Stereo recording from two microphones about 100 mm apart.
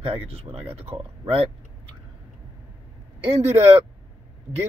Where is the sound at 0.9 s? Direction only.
60° right (ahead or behind).